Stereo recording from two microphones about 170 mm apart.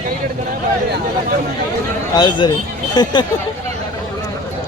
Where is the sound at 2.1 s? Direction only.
25° left (ahead or behind).